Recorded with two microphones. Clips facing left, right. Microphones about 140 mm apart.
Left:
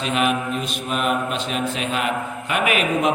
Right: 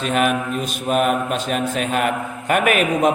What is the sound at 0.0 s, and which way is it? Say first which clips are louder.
A man's voice: right 2 dB; 45° right (ahead or behind).